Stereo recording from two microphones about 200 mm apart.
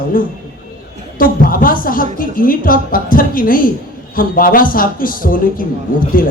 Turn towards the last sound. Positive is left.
turn(degrees=45)  # may be behind; listen again after turning